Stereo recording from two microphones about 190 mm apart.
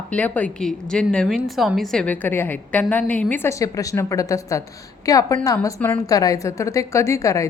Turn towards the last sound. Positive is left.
turn(degrees=15)  # may be behind; listen again after turning